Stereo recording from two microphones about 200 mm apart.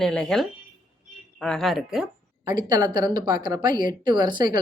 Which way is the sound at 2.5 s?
20° right (ahead or behind).